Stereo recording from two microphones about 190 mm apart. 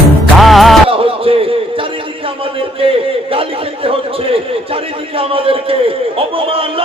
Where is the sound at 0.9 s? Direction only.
30° right (ahead or behind).